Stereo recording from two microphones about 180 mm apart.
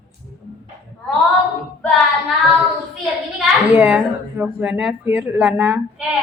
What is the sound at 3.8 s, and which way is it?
Speech, 10° right (ahead or behind).